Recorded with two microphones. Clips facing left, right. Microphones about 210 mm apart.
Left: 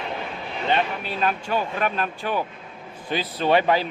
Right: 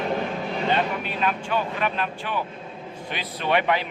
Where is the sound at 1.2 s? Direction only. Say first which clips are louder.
Left 2 dB; 40° left (ahead or behind).